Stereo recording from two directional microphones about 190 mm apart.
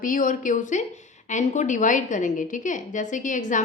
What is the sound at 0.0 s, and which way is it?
A woman's voice, 45° left (ahead or behind).